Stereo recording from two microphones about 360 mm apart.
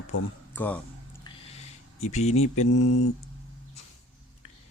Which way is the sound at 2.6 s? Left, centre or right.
Left.